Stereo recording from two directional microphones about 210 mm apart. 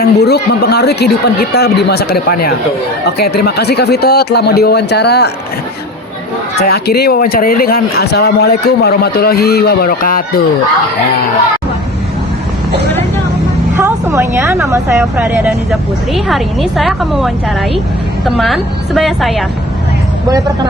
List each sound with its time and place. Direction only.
0.0 s speech: 50° left (ahead or behind)
6.6 s speech: 50° left (ahead or behind)
13.7 s speech: 15° right (ahead or behind)
15.2 s a woman's voice: 5° right (ahead or behind)
18.3 s a woman's voice: centre (ahead or behind)